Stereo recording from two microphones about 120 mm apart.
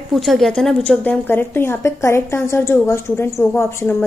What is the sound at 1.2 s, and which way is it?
A woman's voice, 15° left (ahead or behind).